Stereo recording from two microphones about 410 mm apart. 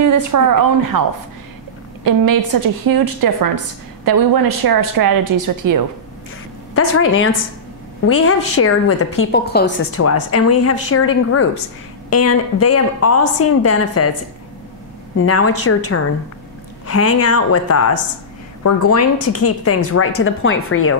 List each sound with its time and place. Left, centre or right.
0.0 s a woman's voice: right
2.0 s a woman's voice: right
6.7 s a woman's voice: left
9.2 s a woman's voice: left
9.9 s a woman's voice: left
15.1 s a woman's voice: left
16.8 s a woman's voice: left